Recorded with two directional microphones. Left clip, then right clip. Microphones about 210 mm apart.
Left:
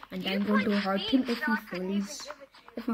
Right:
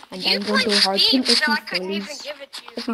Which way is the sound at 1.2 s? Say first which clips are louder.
Right 12 dB; 30° right (ahead or behind).